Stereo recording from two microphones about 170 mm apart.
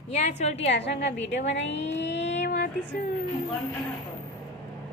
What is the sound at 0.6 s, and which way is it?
A woman's voice, 90° left.